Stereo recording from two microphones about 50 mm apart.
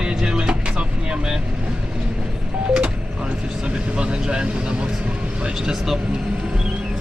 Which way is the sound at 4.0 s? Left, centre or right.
Centre.